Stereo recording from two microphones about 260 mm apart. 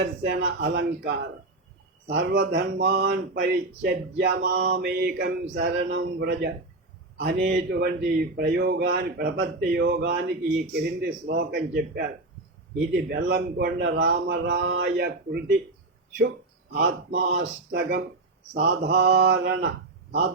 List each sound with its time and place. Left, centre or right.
0.0 s speech: right
16.7 s speech: right